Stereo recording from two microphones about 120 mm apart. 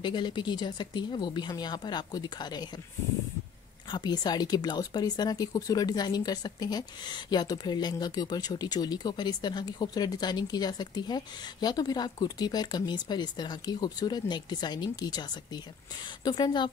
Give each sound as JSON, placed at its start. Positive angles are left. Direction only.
{"t": 0.0, "sound": "speech", "side_deg": 40}
{"t": 3.9, "sound": "speech", "side_deg": 35}